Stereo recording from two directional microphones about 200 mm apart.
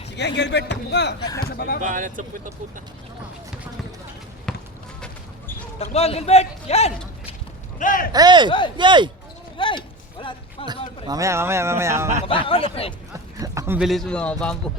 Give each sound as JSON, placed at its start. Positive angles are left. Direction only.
{"t": 0.2, "sound": "speech", "side_deg": 60}
{"t": 1.2, "sound": "speech", "side_deg": 20}
{"t": 1.5, "sound": "speech", "side_deg": 50}
{"t": 1.8, "sound": "speech", "side_deg": -40}
{"t": 4.5, "sound": "basketball bounce", "side_deg": 5}
{"t": 5.8, "sound": "a man's voice", "side_deg": 30}
{"t": 7.8, "sound": "speech", "side_deg": 40}
{"t": 8.1, "sound": "a man's voice", "side_deg": -20}
{"t": 9.6, "sound": "a sound", "side_deg": 25}
{"t": 11.0, "sound": "speech", "side_deg": -15}
{"t": 12.2, "sound": "speech", "side_deg": 25}
{"t": 13.4, "sound": "a man's voice", "side_deg": -15}